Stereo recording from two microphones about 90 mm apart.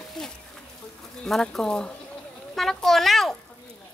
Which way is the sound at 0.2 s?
10° left (ahead or behind).